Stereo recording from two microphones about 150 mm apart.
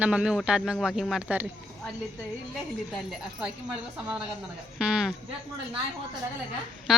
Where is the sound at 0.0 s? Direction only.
10° right (ahead or behind).